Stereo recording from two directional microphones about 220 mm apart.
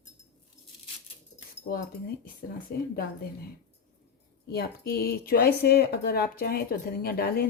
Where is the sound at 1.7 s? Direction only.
45° left (ahead or behind).